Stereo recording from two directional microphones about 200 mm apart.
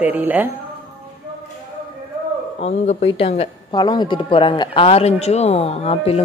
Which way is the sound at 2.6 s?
30° left (ahead or behind).